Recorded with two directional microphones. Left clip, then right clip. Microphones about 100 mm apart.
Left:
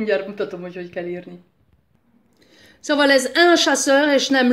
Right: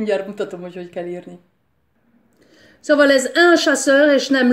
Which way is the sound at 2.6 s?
5° right (ahead or behind).